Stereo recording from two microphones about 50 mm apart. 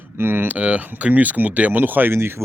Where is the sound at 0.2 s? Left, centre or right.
Right.